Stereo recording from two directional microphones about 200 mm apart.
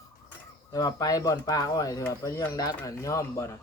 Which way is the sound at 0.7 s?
15° left (ahead or behind).